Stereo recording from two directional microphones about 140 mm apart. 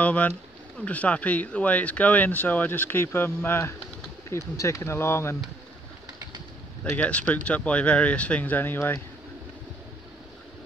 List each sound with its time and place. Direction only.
0.0 s speech: 10° left (ahead or behind)
7.0 s speech: 10° left (ahead or behind)